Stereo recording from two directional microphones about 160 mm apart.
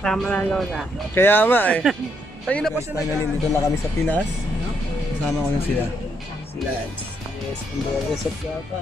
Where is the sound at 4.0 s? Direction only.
15° left (ahead or behind).